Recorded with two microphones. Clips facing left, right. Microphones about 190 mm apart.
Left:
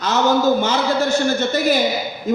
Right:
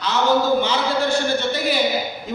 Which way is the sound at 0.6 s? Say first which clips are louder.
Left 2 dB; 45° left (ahead or behind).